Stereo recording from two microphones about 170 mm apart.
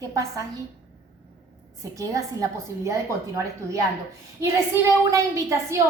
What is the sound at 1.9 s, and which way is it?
A woman's voice, 20° right (ahead or behind).